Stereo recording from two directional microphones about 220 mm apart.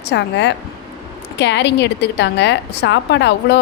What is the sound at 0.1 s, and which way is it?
A woman's voice, 50° left (ahead or behind).